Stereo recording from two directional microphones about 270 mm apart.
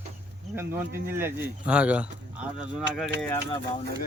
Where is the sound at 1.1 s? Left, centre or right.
Centre.